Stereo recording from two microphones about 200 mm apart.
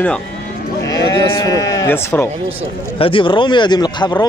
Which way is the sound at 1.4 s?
15° left (ahead or behind).